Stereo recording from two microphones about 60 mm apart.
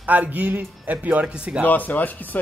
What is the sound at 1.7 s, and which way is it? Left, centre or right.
Speech, left.